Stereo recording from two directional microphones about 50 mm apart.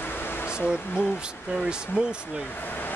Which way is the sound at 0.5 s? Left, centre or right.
Centre.